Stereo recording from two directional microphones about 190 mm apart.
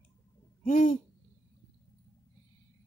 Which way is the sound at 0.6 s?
40° left (ahead or behind).